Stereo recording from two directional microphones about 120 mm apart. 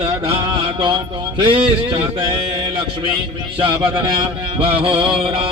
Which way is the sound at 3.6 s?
45° right (ahead or behind).